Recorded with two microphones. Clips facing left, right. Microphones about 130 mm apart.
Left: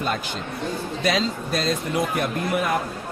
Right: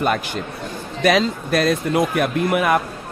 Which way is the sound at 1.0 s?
65° right (ahead or behind).